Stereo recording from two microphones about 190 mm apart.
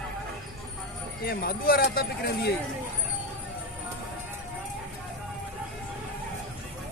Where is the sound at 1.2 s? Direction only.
50° left (ahead or behind).